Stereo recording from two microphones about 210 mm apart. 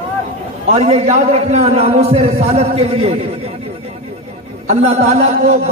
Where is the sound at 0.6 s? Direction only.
30° right (ahead or behind).